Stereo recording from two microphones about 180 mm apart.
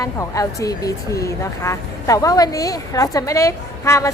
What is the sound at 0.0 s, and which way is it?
Speech, 20° left (ahead or behind).